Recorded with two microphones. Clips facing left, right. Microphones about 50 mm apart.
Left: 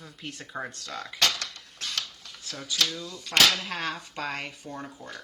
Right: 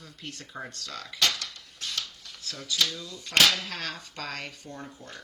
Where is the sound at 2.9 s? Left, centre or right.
Centre.